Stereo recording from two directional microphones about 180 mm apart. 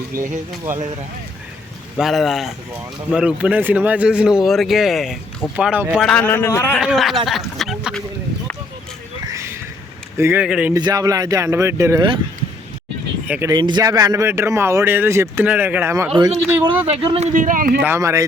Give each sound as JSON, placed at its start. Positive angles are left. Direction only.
{"t": 0.2, "sound": "speech", "side_deg": -15}
{"t": 2.0, "sound": "speech", "side_deg": 0}
{"t": 6.7, "sound": "speech", "side_deg": 0}
{"t": 7.3, "sound": "a sound", "side_deg": 0}
{"t": 10.2, "sound": "speech", "side_deg": -10}
{"t": 10.8, "sound": "speech", "side_deg": -20}
{"t": 13.2, "sound": "speech", "side_deg": -10}
{"t": 13.5, "sound": "speech", "side_deg": -25}
{"t": 16.8, "sound": "speech", "side_deg": -35}
{"t": 17.8, "sound": "speech", "side_deg": -15}